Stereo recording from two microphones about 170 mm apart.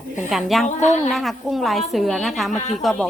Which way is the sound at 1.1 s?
Centre (ahead or behind).